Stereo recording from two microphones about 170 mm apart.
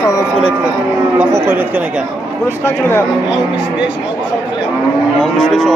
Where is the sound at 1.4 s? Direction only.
10° right (ahead or behind).